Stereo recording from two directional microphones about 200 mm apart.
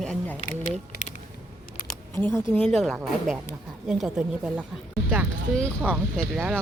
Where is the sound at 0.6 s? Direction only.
35° left (ahead or behind).